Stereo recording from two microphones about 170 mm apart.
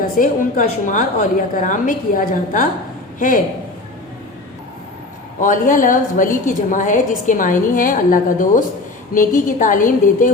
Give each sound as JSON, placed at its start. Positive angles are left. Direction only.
{"t": 0.2, "sound": "a woman's voice", "side_deg": 50}
{"t": 5.4, "sound": "a woman's voice", "side_deg": 50}